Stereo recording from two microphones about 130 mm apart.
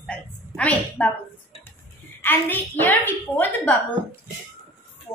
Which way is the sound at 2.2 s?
15° left (ahead or behind).